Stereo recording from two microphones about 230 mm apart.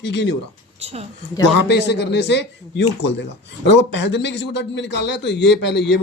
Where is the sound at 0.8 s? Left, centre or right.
Right.